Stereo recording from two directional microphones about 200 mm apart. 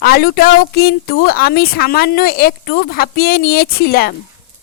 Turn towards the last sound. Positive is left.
turn(degrees=50)  # may be behind; listen again after turning